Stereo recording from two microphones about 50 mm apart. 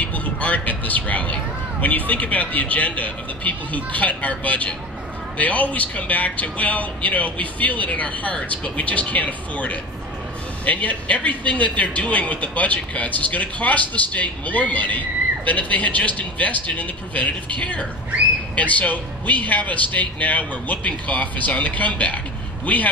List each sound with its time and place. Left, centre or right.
0.0 s a man's voice: left